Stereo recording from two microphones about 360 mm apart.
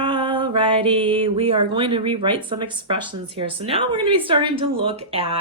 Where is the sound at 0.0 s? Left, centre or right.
Centre.